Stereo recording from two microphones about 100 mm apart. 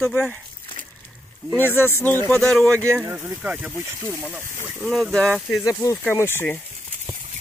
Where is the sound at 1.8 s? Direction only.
25° left (ahead or behind).